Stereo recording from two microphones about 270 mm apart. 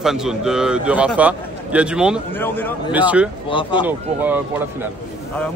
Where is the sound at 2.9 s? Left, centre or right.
Centre.